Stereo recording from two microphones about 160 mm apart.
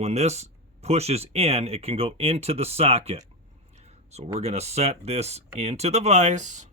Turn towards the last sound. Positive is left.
turn(degrees=-50)  # may be behind; listen again after turning